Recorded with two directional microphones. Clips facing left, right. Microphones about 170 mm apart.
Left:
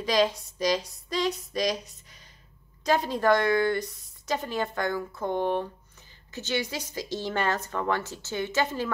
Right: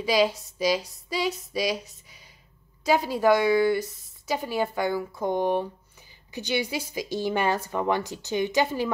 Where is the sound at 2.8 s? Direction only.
5° right (ahead or behind).